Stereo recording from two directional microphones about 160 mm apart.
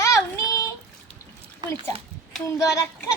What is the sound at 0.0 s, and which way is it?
Child singing, 20° left (ahead or behind).